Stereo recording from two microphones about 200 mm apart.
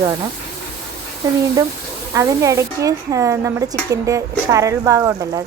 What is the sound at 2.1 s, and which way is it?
A woman's voice, 15° right (ahead or behind).